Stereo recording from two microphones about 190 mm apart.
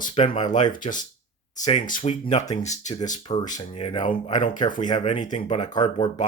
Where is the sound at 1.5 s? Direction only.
35° left (ahead or behind).